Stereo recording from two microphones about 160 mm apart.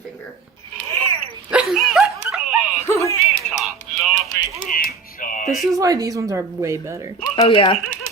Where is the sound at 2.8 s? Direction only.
20° left (ahead or behind).